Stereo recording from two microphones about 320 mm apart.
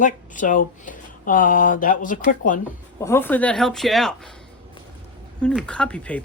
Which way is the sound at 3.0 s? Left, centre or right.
Centre.